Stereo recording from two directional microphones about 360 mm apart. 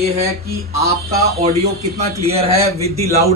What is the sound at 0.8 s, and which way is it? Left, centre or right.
Speech, right.